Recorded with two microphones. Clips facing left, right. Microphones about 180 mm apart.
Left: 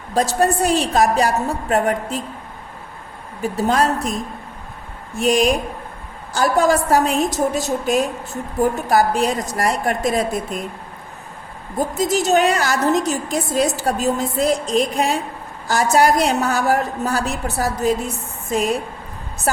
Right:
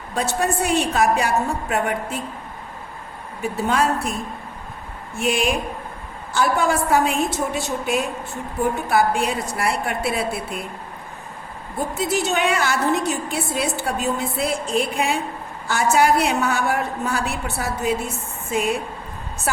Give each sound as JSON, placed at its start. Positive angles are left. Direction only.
{"t": 0.1, "sound": "a woman's voice", "side_deg": 35}
{"t": 3.4, "sound": "a woman's voice", "side_deg": 40}
{"t": 11.8, "sound": "a woman's voice", "side_deg": 40}